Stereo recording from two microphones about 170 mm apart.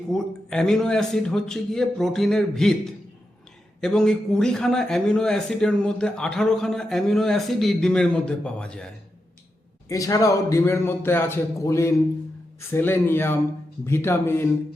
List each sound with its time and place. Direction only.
0.1 s a man's voice: 5° left (ahead or behind)
3.8 s a man's voice: 5° left (ahead or behind)
9.9 s a man's voice: 20° left (ahead or behind)